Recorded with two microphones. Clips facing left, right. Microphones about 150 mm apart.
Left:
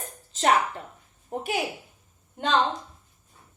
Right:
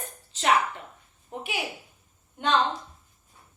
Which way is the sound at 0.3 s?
35° left (ahead or behind).